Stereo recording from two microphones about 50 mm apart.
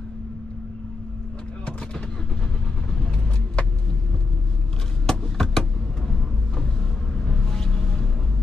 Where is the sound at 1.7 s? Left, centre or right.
Left.